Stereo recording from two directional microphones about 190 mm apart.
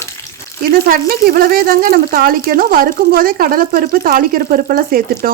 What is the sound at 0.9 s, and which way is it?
Speech, 50° right (ahead or behind).